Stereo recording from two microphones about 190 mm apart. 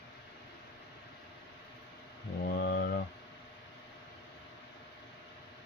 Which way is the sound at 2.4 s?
60° left (ahead or behind).